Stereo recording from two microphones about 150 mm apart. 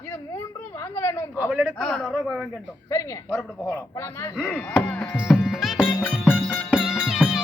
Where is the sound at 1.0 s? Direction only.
15° left (ahead or behind).